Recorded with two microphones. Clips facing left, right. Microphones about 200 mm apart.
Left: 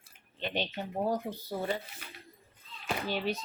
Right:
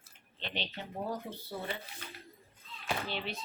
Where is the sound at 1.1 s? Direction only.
40° left (ahead or behind).